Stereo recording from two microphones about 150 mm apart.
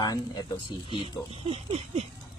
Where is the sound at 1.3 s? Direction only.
40° right (ahead or behind).